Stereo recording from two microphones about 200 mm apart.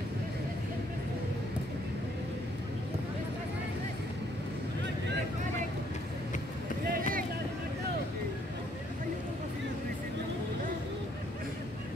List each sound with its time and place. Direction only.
6.9 s vehicle: 45° right (ahead or behind)